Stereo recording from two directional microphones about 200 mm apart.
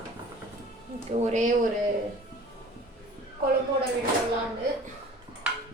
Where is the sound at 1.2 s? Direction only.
35° right (ahead or behind).